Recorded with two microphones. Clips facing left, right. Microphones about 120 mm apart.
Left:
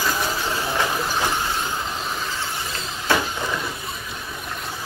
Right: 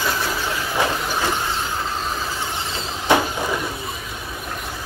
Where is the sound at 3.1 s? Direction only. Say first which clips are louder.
Right 4 dB; 20° right (ahead or behind).